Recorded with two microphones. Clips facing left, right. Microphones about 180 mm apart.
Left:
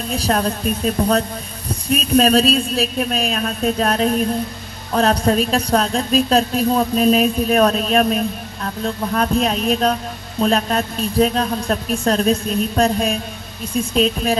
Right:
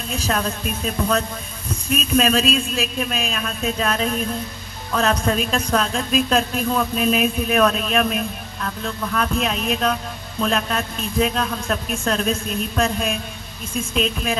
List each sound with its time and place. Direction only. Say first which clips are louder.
0.1 s a woman's voice: left 4 dB; 35° left (ahead or behind)